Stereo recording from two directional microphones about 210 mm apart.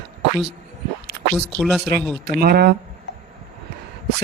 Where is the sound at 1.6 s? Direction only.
Centre (ahead or behind).